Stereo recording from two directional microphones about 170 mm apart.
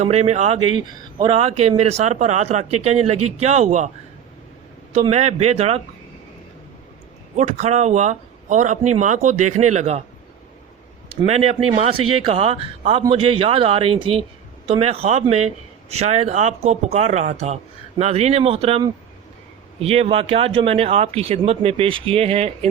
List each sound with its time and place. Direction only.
0.0 s a man's voice: 40° right (ahead or behind)
4.9 s a man's voice: 40° right (ahead or behind)
7.3 s speech: 40° right (ahead or behind)
11.3 s a man's voice: 35° right (ahead or behind)
19.8 s a man's voice: 35° right (ahead or behind)